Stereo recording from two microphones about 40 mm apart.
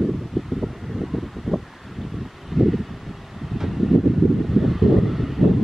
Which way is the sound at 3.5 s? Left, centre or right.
Centre.